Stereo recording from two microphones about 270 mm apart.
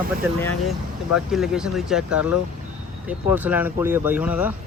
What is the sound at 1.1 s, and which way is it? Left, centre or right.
Speech, centre.